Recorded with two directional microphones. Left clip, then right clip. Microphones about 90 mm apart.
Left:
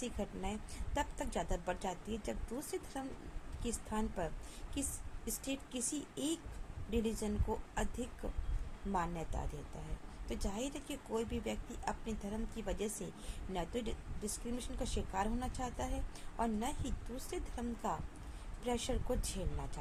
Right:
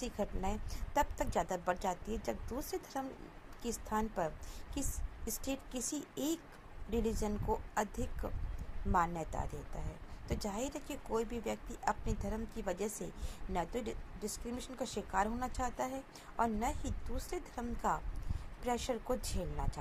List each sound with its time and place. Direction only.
0.0 s a woman's voice: 25° right (ahead or behind)